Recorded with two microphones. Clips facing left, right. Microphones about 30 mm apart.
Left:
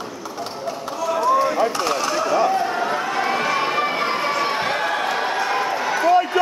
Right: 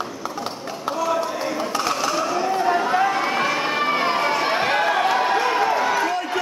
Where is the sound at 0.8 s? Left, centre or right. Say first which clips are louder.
Left 2 dB; centre.